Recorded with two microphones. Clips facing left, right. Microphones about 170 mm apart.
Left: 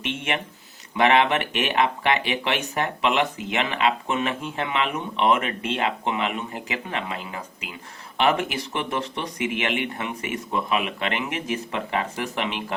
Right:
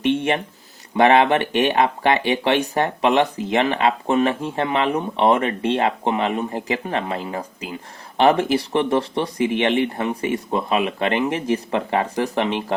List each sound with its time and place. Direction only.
0.0 s speech: 35° right (ahead or behind)